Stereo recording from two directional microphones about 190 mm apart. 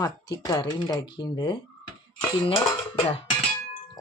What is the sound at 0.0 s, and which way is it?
Speech, 20° left (ahead or behind).